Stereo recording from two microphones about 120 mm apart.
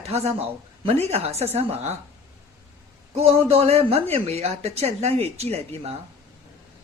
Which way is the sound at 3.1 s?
60° right (ahead or behind).